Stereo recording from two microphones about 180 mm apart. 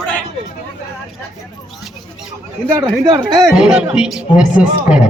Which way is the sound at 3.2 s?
5° right (ahead or behind).